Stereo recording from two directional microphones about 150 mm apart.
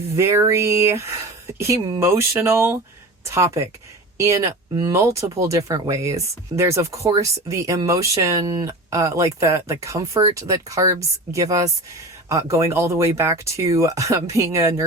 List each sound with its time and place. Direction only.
0.2 s speech: 20° right (ahead or behind)